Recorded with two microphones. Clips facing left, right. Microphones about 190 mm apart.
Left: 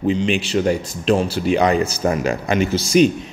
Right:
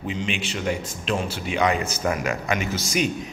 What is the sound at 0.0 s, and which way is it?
A man's voice, 35° left (ahead or behind).